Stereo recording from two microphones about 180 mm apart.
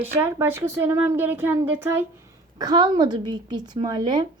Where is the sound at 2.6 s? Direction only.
25° right (ahead or behind).